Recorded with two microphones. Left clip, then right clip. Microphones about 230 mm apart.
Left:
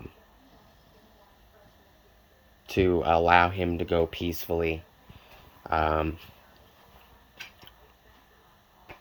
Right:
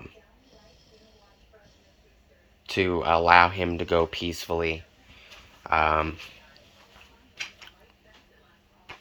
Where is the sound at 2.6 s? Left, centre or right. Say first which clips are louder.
Even; left.